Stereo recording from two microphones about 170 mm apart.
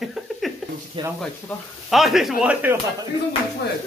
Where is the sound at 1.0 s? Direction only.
30° right (ahead or behind).